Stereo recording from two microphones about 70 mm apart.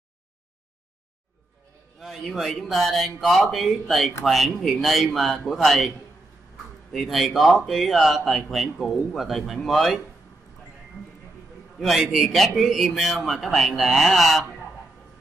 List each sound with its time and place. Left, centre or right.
2.0 s a man's voice: centre
6.9 s a man's voice: centre
11.8 s a man's voice: centre